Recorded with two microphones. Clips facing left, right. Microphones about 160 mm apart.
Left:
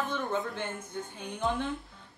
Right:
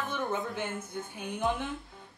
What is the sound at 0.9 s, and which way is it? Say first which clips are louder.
Speech: right 1 dB; 10° right (ahead or behind).